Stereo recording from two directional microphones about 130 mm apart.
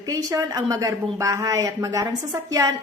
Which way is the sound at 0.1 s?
25° right (ahead or behind).